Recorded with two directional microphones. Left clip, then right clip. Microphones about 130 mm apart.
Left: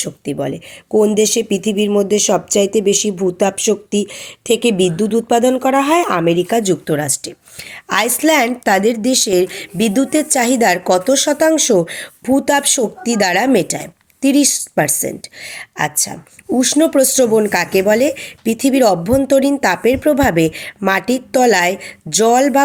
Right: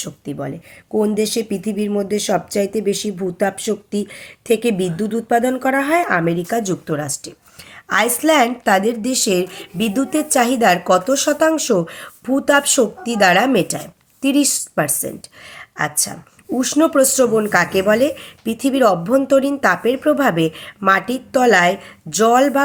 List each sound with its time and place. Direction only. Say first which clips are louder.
0.0 s a woman's voice: left 6 dB; 45° left (ahead or behind)